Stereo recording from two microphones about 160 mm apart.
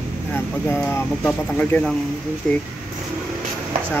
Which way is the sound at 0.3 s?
10° left (ahead or behind).